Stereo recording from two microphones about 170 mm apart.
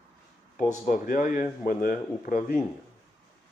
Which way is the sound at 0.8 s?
55° left (ahead or behind).